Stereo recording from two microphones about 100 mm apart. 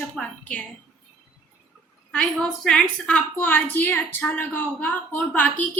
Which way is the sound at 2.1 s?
5° left (ahead or behind).